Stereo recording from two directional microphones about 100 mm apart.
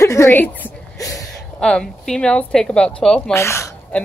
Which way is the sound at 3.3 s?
30° left (ahead or behind).